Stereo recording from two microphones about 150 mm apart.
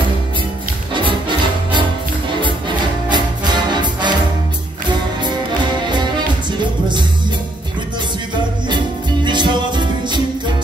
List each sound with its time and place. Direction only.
3.1 s music: 30° right (ahead or behind)
5.9 s music: 30° right (ahead or behind)
8.6 s music: 30° right (ahead or behind)